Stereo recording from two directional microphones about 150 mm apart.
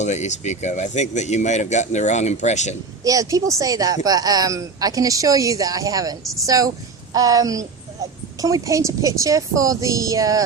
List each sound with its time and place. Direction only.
0.0 s speech: 50° left (ahead or behind)
3.0 s speech: 25° right (ahead or behind)